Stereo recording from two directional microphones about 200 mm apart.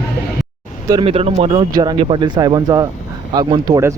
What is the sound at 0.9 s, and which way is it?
Speech, 25° right (ahead or behind).